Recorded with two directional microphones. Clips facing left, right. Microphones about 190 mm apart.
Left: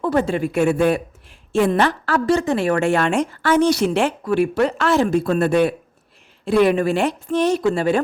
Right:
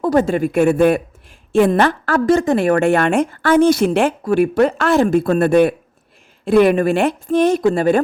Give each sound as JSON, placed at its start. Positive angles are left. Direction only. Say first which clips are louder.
{"t": 0.0, "sound": "a woman's voice", "louder": "right 4 dB", "side_deg": -40}